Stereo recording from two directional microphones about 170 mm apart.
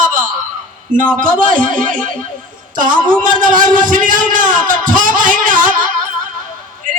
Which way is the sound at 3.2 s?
50° right (ahead or behind).